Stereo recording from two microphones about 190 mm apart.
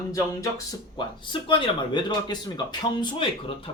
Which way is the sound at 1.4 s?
25° left (ahead or behind).